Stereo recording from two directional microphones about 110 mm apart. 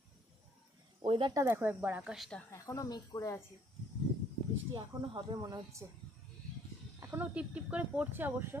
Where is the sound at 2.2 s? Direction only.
10° left (ahead or behind).